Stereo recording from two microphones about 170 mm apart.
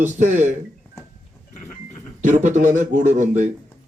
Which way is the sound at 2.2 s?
45° right (ahead or behind).